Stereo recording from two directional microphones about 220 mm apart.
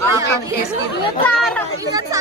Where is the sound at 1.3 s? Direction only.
5° left (ahead or behind).